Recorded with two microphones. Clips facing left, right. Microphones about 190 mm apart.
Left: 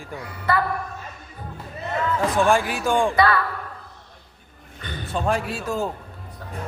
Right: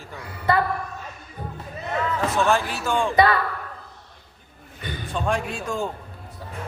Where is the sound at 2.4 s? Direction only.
10° left (ahead or behind).